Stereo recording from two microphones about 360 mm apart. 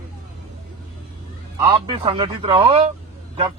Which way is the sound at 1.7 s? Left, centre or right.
Centre.